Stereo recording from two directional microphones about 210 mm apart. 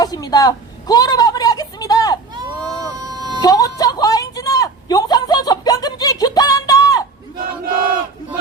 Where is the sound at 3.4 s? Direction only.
15° left (ahead or behind).